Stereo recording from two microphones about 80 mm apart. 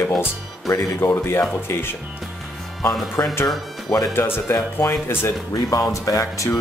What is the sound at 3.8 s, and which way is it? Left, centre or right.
Speech, left.